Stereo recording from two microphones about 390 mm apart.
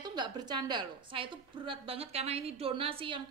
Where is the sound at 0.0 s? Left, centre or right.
Centre.